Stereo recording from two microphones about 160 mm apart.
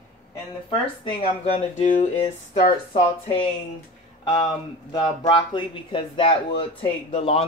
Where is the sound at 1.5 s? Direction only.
50° left (ahead or behind).